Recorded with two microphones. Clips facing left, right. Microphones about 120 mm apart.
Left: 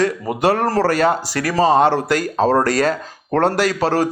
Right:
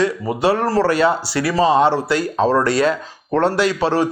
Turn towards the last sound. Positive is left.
turn(degrees=40)  # may be behind; listen again after turning